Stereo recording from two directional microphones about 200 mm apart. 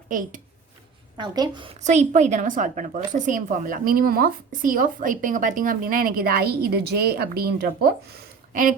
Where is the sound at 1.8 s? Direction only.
35° right (ahead or behind).